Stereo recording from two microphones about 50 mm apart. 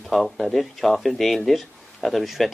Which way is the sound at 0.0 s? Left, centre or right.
Centre.